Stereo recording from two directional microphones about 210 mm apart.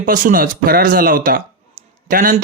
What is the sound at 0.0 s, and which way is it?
Speech, 40° right (ahead or behind).